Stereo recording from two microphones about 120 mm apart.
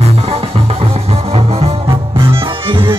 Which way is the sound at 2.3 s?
45° right (ahead or behind).